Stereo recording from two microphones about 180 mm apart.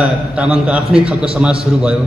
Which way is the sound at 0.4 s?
5° right (ahead or behind).